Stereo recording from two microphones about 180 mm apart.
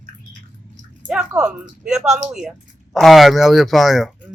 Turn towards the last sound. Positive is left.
turn(degrees=0)  # may be behind; listen again after turning